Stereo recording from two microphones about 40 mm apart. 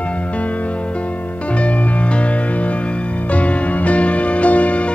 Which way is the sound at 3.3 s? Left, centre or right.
Left.